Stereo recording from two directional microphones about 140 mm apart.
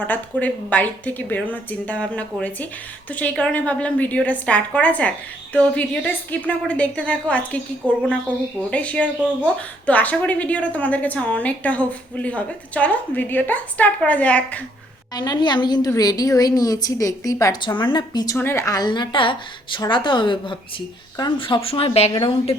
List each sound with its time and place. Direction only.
0.0 s a woman's voice: 10° left (ahead or behind)
15.1 s a woman's voice: 30° left (ahead or behind)
18.3 s a woman's voice: 20° left (ahead or behind); by 22.1 s 45° left (ahead or behind)